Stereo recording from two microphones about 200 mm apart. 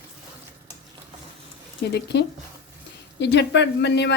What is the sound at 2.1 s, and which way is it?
A woman's voice, 60° left (ahead or behind).